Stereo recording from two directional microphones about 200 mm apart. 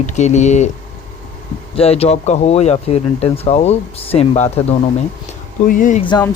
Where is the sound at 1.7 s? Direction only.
30° left (ahead or behind).